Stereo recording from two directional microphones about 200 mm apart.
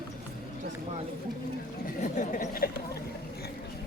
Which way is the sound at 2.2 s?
40° left (ahead or behind).